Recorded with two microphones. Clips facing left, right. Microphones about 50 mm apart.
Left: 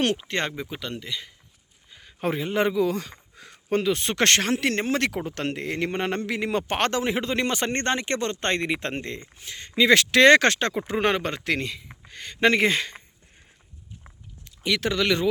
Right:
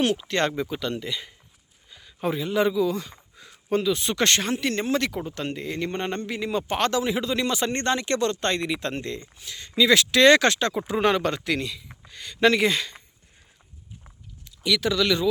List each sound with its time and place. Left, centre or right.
0.2 s speech: left
0.4 s speech: centre
0.9 s speech: centre
2.0 s speech: left
6.4 s speech: left
14.6 s speech: left